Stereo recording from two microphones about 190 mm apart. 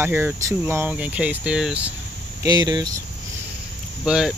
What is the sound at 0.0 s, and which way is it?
Speech, 10° right (ahead or behind).